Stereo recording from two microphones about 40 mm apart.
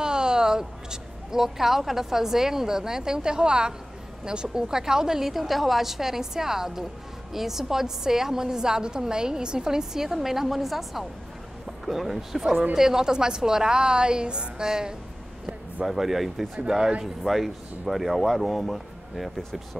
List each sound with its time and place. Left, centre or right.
0.0 s a woman's voice: centre
17.2 s speech: centre